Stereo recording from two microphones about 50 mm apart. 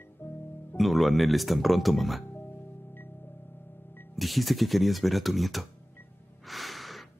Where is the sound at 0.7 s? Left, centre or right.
Centre.